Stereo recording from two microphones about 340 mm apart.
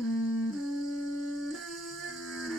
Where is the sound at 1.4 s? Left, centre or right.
Centre.